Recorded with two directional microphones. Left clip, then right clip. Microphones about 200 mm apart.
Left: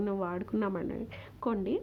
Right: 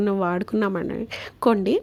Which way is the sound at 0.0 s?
35° right (ahead or behind).